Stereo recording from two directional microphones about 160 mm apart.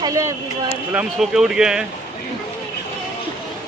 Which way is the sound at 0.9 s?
5° right (ahead or behind).